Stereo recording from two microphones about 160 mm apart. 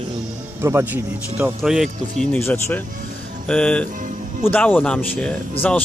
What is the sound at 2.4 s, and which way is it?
Speech, 10° left (ahead or behind).